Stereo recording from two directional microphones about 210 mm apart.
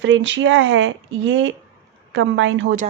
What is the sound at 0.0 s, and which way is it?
Speech, 60° right (ahead or behind).